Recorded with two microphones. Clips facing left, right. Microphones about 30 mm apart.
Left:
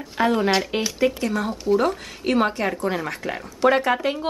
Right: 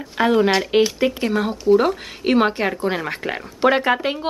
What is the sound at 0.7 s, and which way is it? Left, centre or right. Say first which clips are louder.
Speech: right 5 dB; right.